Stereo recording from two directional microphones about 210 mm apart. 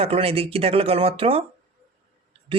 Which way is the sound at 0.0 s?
30° right (ahead or behind).